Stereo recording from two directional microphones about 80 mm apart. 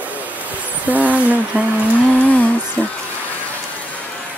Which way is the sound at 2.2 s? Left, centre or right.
Centre.